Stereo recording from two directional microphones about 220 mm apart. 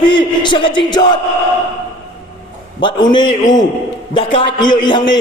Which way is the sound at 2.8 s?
20° left (ahead or behind).